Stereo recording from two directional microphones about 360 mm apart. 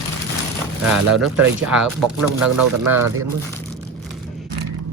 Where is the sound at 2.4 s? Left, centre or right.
Right.